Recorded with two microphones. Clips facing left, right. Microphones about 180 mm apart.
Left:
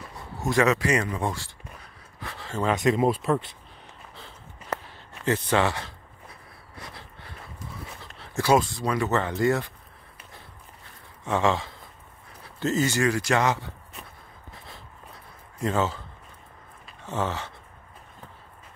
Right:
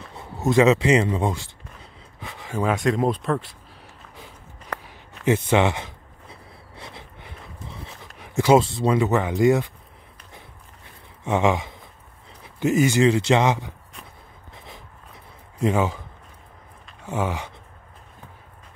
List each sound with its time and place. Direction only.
0.1 s a sound: 20° right (ahead or behind)
2.7 s speech: centre (ahead or behind)
5.2 s a man's voice: 20° right (ahead or behind)
6.8 s a sound: 20° right (ahead or behind)
8.2 s speech: 20° right (ahead or behind)
11.2 s a man's voice: 20° right (ahead or behind)
15.6 s speech: 15° right (ahead or behind)
17.0 s speech: 10° right (ahead or behind)